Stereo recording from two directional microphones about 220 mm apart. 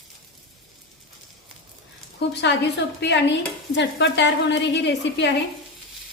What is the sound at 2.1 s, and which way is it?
A woman's voice, 50° left (ahead or behind).